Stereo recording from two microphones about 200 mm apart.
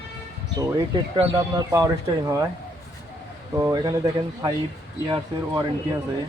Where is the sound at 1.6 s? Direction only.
15° right (ahead or behind).